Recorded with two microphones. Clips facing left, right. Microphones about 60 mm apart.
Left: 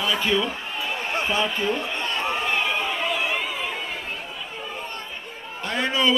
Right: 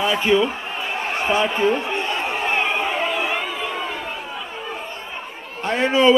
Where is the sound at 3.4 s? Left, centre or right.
Centre.